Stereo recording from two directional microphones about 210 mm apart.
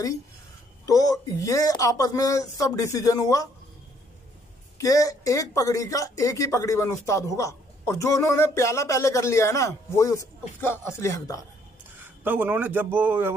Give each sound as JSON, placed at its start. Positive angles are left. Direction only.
{"t": 0.8, "sound": "speech", "side_deg": 15}
{"t": 4.7, "sound": "speech", "side_deg": 15}
{"t": 12.0, "sound": "speech", "side_deg": -10}